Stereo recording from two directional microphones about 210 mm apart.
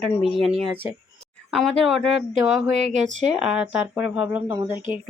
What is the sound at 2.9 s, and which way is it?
Speech, 35° right (ahead or behind).